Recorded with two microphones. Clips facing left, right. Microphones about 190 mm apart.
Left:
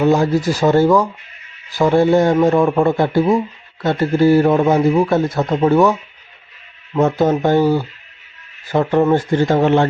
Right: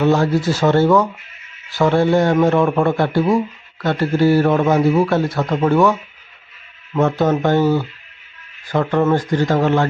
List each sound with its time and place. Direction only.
0.0 s a man's voice: 15° left (ahead or behind)